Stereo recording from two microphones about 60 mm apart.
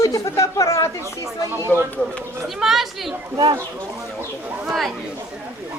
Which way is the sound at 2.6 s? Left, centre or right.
Centre.